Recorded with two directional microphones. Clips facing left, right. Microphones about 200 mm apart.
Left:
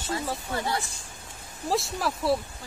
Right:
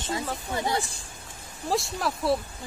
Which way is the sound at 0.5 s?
20° right (ahead or behind).